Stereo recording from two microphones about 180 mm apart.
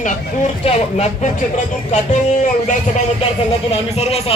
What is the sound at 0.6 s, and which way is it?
Speech, 35° left (ahead or behind).